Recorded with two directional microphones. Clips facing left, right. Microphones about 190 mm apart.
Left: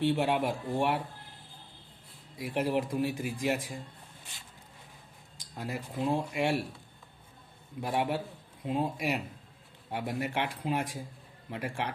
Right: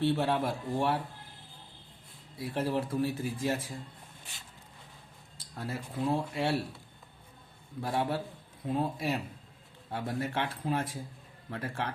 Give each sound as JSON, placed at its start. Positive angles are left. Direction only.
{"t": 0.0, "sound": "speech", "side_deg": 15}
{"t": 2.4, "sound": "speech", "side_deg": 15}
{"t": 5.4, "sound": "speech", "side_deg": 15}
{"t": 7.8, "sound": "speech", "side_deg": 15}